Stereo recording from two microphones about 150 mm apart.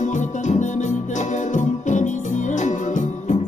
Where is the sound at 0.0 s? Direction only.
55° left (ahead or behind).